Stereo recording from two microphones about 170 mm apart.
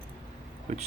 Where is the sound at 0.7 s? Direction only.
50° right (ahead or behind).